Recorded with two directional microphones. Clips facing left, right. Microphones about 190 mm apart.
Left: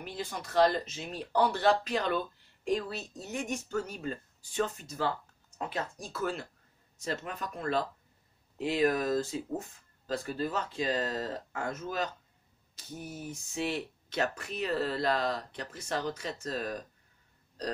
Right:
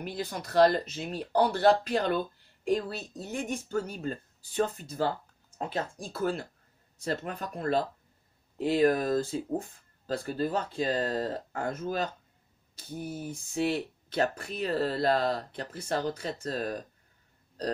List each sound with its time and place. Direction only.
0.2 s speech: 40° right (ahead or behind)